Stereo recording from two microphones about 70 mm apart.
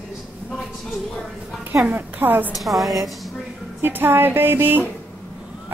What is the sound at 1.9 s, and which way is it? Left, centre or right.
Speech, right.